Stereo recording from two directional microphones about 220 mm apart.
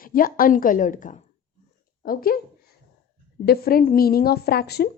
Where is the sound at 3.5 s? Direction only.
40° left (ahead or behind).